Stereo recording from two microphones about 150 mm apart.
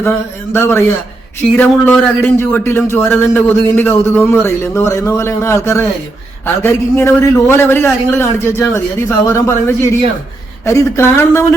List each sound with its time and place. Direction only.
0.5 s a man's voice: 15° left (ahead or behind)